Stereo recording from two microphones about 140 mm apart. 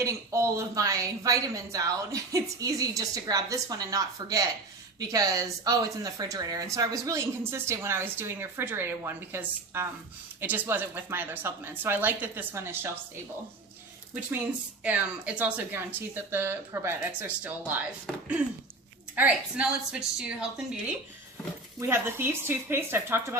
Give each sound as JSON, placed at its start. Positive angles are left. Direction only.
{"t": 0.0, "sound": "speech", "side_deg": -20}
{"t": 14.8, "sound": "speech", "side_deg": -10}
{"t": 19.1, "sound": "speech", "side_deg": -10}
{"t": 21.8, "sound": "speech", "side_deg": -15}